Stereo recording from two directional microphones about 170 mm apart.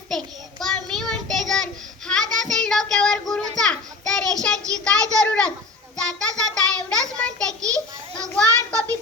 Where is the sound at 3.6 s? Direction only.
5° left (ahead or behind).